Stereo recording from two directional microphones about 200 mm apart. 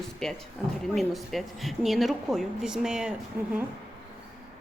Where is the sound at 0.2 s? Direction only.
5° left (ahead or behind).